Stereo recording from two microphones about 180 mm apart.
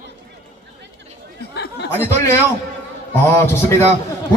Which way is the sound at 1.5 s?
65° left (ahead or behind).